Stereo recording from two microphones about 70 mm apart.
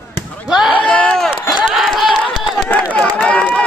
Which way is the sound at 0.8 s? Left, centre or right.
Centre.